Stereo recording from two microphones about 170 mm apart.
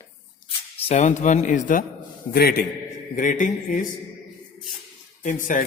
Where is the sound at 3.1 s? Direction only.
50° left (ahead or behind).